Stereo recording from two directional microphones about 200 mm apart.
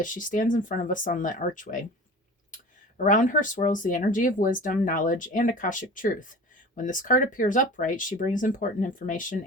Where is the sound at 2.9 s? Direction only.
40° left (ahead or behind).